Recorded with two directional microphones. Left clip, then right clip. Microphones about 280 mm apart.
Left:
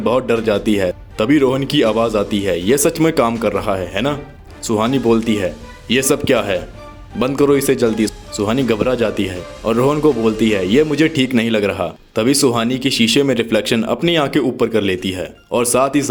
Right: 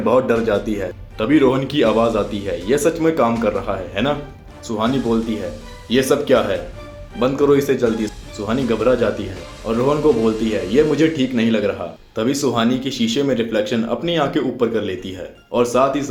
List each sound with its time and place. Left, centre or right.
0.0 s a man's voice: left